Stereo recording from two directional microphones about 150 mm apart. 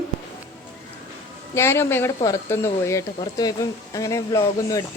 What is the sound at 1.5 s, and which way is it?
Speech, 15° left (ahead or behind).